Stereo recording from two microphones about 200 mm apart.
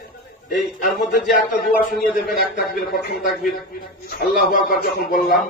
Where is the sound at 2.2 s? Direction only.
50° left (ahead or behind).